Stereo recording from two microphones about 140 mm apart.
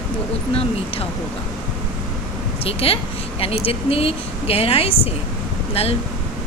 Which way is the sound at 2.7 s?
45° left (ahead or behind).